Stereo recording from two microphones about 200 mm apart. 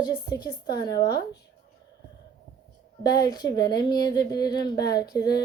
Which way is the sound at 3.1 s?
20° left (ahead or behind).